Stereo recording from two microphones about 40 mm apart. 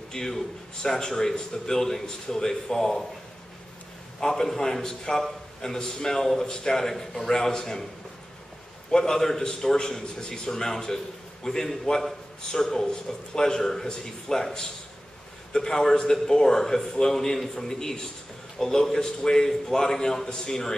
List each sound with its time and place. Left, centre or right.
0.1 s a man's voice: centre
4.2 s a man's voice: centre
8.9 s a man's voice: centre